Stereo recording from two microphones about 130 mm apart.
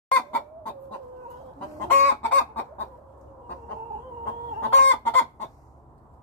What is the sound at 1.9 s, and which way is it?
Chicken, 15° left (ahead or behind).